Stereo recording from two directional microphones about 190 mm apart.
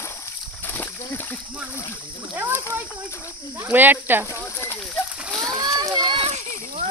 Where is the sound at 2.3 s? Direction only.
10° right (ahead or behind).